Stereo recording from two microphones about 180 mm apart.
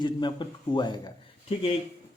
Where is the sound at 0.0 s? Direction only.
25° left (ahead or behind).